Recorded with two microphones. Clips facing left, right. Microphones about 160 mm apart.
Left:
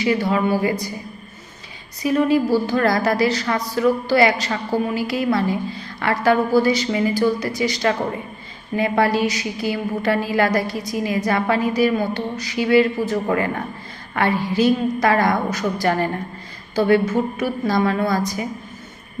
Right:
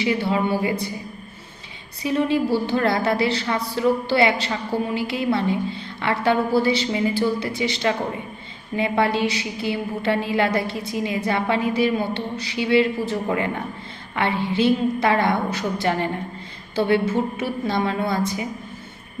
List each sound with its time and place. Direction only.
0.3 s a woman's voice: 20° right (ahead or behind)
2.0 s a woman's voice: 25° right (ahead or behind)